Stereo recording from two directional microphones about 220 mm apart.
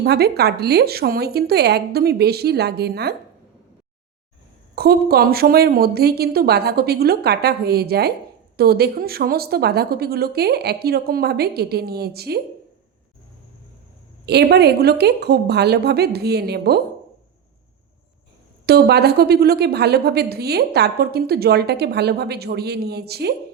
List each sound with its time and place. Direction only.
0.0 s a woman's voice: 45° right (ahead or behind)
4.7 s a woman's voice: 45° right (ahead or behind)
14.3 s a woman's voice: 50° right (ahead or behind)
18.6 s a woman's voice: 45° right (ahead or behind)